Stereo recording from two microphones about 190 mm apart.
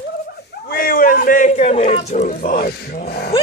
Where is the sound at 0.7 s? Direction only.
50° left (ahead or behind).